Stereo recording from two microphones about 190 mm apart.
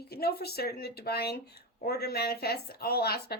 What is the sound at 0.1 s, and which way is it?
Speech, 55° left (ahead or behind).